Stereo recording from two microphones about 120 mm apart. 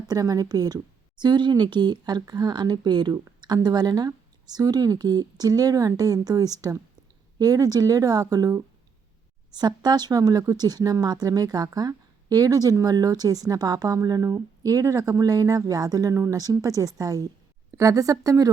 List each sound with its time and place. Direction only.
0.1 s a woman's voice: 30° right (ahead or behind)